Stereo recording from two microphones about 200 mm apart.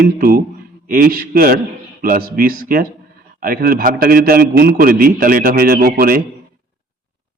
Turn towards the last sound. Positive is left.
turn(degrees=-45)  # may be behind; listen again after turning